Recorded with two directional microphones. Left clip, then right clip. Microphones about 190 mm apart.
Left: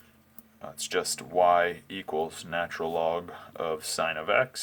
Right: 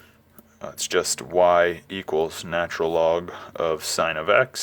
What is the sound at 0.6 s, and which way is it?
Speech, 45° right (ahead or behind).